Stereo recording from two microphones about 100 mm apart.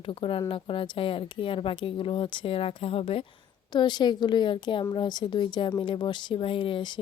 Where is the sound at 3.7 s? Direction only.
45° left (ahead or behind).